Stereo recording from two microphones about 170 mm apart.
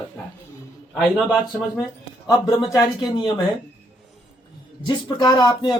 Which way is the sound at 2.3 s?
20° left (ahead or behind).